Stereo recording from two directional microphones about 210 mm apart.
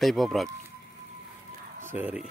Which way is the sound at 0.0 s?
Centre (ahead or behind).